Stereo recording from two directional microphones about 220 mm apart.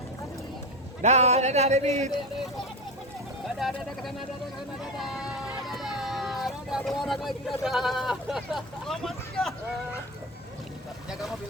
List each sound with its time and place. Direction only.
1.0 s speech: 30° right (ahead or behind)
3.6 s speech: centre (ahead or behind)